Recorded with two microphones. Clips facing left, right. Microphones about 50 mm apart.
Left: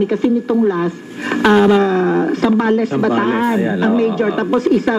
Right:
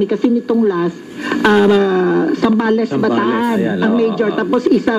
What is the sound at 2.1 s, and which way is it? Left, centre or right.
A man's voice, left.